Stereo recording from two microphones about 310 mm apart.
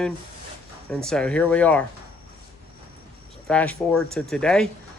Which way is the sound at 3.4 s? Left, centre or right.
Centre.